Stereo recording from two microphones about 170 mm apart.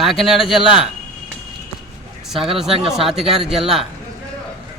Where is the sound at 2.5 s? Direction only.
5° right (ahead or behind).